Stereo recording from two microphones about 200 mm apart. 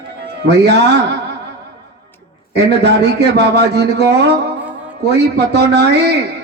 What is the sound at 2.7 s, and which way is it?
A man's voice, 55° right (ahead or behind).